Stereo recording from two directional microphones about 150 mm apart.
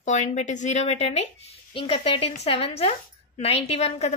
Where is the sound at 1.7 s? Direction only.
35° left (ahead or behind).